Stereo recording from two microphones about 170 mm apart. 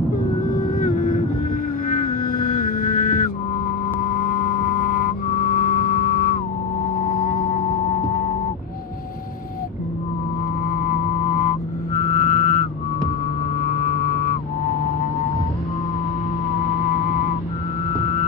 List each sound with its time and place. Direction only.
0.7 s vehicle: 55° left (ahead or behind)
2.5 s music: 55° left (ahead or behind)
10.8 s music: 50° left (ahead or behind)